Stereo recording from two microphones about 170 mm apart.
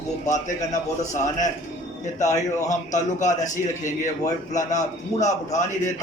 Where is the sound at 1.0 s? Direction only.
45° left (ahead or behind).